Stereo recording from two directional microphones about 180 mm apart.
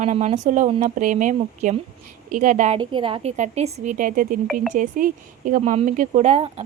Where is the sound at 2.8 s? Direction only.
30° right (ahead or behind).